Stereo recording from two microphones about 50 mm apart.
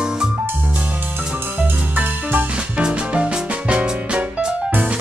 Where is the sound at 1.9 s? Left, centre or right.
Right.